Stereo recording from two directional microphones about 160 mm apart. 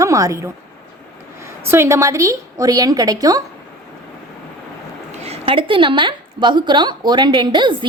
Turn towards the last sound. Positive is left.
turn(degrees=-30)  # may be behind; listen again after turning